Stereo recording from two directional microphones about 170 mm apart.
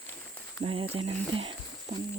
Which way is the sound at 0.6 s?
35° right (ahead or behind).